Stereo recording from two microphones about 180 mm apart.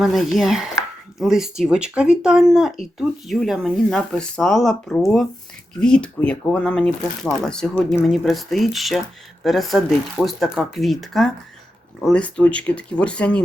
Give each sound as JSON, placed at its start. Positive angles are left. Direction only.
{"t": 0.0, "sound": "speech", "side_deg": 0}